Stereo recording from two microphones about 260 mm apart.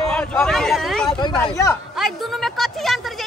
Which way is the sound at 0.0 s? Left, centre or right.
Centre.